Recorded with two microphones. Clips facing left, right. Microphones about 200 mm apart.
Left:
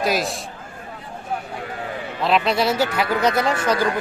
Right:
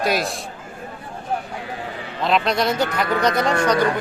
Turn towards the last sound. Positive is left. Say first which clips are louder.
# right 1 dB
turn(degrees=5)  # may be behind; listen again after turning